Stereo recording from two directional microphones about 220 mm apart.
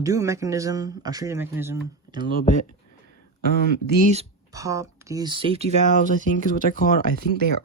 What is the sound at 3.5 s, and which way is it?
Speech, 50° right (ahead or behind).